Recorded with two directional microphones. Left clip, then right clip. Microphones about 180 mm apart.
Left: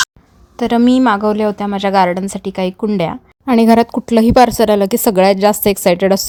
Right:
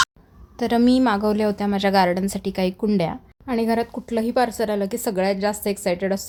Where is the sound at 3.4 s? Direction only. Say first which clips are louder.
Left 11 dB; 50° left (ahead or behind).